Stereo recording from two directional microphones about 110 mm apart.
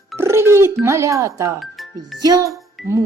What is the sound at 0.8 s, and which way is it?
Speech, 25° right (ahead or behind).